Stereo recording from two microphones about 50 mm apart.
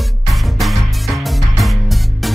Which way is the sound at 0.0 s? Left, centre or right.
Centre.